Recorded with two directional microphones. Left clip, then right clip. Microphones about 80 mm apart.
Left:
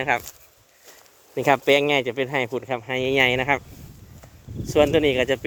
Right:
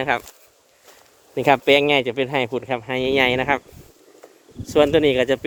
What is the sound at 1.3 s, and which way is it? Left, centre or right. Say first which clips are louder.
Speech: right 3 dB; centre.